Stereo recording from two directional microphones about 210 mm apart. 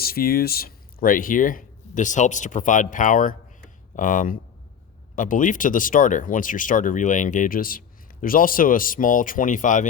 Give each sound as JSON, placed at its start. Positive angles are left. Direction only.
{"t": 0.0, "sound": "speech", "side_deg": 45}